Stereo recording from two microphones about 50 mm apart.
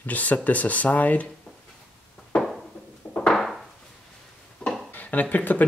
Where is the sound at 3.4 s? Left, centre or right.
Centre.